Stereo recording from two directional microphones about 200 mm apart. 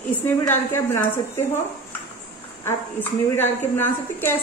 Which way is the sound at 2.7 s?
10° left (ahead or behind).